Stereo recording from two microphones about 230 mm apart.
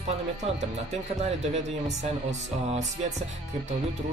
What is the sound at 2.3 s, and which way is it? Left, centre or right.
Music, right.